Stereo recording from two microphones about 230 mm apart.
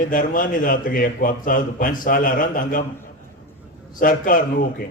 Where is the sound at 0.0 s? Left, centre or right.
Left.